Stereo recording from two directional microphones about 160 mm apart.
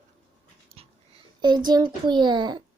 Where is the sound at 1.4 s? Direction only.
25° right (ahead or behind).